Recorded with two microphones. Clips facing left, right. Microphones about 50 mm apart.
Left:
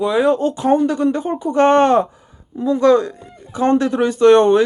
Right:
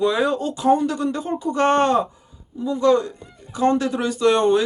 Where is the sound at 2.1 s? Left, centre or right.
Left.